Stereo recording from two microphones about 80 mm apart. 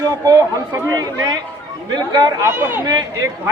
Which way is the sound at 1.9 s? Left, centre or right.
Right.